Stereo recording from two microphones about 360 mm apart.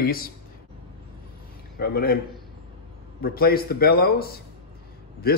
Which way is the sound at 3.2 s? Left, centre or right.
Left.